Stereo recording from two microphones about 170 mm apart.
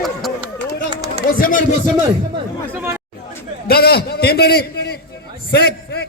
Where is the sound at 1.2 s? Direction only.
55° left (ahead or behind).